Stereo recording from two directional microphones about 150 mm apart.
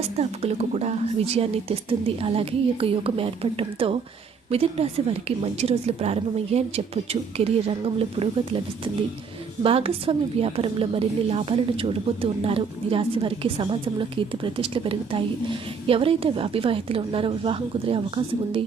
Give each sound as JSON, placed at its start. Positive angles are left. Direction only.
{"t": 0.2, "sound": "a woman's voice", "side_deg": -45}